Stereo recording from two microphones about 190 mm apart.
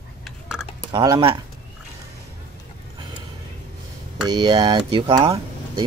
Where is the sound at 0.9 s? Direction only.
25° right (ahead or behind).